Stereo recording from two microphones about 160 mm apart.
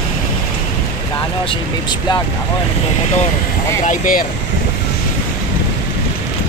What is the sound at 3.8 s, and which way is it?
Speech, 55° left (ahead or behind).